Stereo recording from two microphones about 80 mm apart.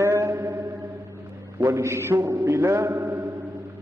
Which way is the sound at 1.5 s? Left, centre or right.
Right.